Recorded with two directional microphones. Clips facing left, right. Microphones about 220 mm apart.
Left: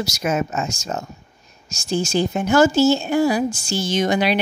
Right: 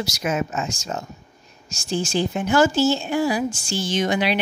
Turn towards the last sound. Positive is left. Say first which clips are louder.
# left 2 dB
turn(degrees=40)  # may be behind; listen again after turning